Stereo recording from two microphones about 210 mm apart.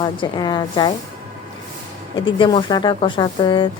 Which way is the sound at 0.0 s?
20° left (ahead or behind).